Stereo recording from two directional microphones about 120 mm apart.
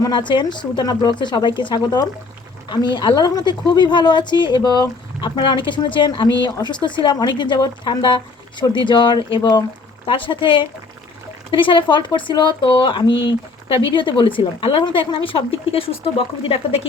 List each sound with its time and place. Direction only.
0.0 s a woman's voice: 40° left (ahead or behind)
10.1 s speech: 45° left (ahead or behind)